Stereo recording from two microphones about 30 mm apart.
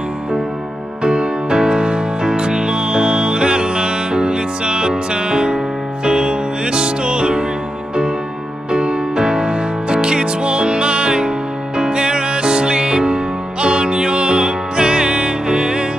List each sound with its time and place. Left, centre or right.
1.0 s music: right
8.7 s music: right